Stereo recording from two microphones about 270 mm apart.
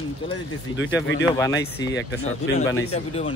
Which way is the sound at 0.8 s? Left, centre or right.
Left.